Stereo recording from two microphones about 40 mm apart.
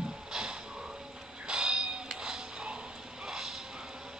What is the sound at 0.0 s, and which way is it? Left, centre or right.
Music, centre.